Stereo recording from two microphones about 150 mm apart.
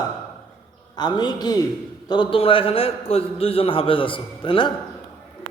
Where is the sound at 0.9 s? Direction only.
30° left (ahead or behind).